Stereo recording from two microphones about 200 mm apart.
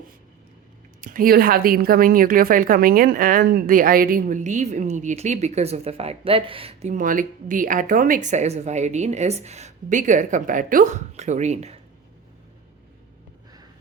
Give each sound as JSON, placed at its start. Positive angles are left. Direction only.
{"t": 1.0, "sound": "speech", "side_deg": -45}
{"t": 6.9, "sound": "speech", "side_deg": -40}